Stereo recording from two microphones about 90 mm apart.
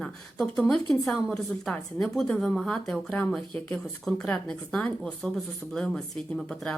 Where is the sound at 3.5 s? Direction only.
20° left (ahead or behind).